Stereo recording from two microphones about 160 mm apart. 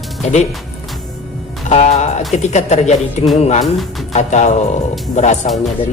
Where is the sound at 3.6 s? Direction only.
Centre (ahead or behind).